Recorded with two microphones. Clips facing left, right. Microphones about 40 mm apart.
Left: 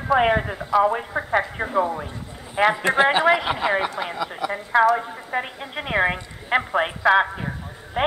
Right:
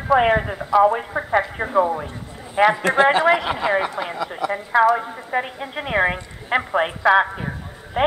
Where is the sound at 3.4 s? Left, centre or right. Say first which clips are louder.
Even; left.